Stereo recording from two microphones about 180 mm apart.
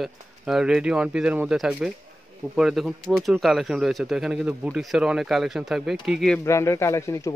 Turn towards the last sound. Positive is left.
turn(degrees=15)  # may be behind; listen again after turning